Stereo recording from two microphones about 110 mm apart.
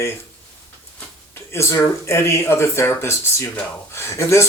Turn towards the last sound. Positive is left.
turn(degrees=25)  # may be behind; listen again after turning